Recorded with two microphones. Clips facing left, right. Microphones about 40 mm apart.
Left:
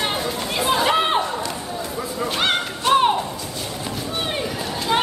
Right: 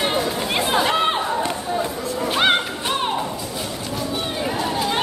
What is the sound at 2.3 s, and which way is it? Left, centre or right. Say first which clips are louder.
Music: right 4 dB; centre.